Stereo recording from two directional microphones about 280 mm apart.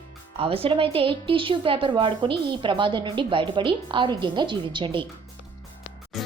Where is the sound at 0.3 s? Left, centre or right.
Centre.